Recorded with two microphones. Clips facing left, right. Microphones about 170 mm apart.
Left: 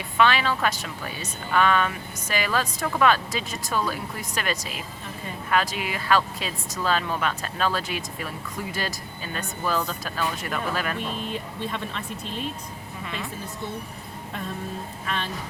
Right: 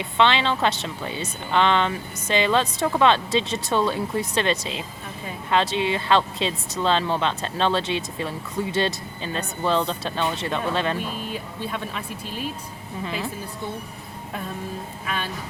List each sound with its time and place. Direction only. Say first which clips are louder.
0.0 s speech: right 1 dB; 25° right (ahead or behind)
11.6 s speech: right 2 dB; 10° right (ahead or behind)
13.1 s a woman's voice: right 4 dB; 30° right (ahead or behind)
15.0 s speech: right 1 dB; 5° right (ahead or behind)